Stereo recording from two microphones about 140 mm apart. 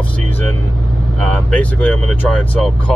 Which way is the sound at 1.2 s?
10° left (ahead or behind).